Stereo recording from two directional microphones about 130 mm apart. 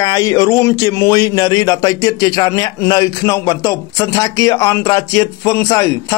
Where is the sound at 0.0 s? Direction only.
30° left (ahead or behind).